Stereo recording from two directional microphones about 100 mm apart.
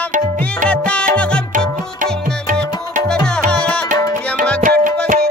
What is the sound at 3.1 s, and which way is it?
Music, 10° left (ahead or behind).